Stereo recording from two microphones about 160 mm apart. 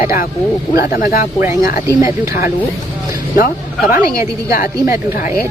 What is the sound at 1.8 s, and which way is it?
Speech, 20° right (ahead or behind).